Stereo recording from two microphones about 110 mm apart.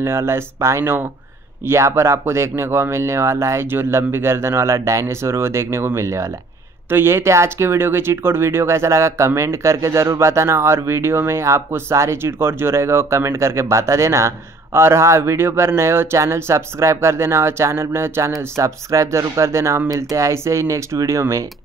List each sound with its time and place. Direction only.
0.0 s speech: 25° right (ahead or behind)